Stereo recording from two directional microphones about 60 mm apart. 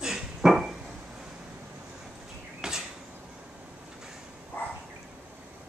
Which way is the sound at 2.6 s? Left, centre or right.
Centre.